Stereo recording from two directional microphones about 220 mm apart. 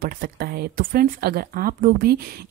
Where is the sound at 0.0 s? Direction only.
45° right (ahead or behind).